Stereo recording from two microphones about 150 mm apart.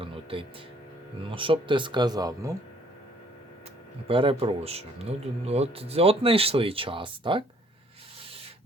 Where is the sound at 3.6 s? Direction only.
35° right (ahead or behind).